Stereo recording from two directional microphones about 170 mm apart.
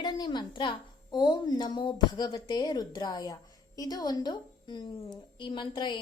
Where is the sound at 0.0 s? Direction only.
25° left (ahead or behind).